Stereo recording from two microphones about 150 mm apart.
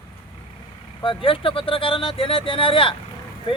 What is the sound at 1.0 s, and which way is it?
Speech, 35° left (ahead or behind).